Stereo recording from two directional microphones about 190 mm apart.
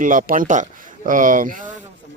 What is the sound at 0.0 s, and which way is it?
Speech, 45° right (ahead or behind).